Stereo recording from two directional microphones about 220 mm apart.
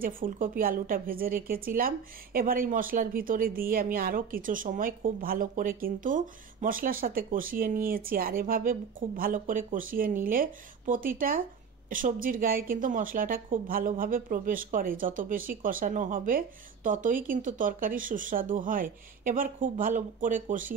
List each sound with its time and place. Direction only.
0.0 s a woman's voice: 40° right (ahead or behind)